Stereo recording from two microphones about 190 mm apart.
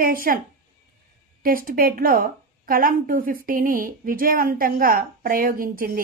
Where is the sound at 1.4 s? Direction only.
50° right (ahead or behind).